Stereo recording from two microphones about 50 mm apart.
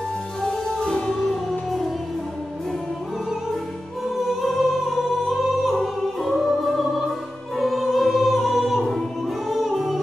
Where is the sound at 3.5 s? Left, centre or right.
Centre.